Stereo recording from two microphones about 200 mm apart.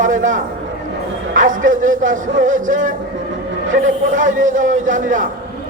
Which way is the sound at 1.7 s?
40° right (ahead or behind).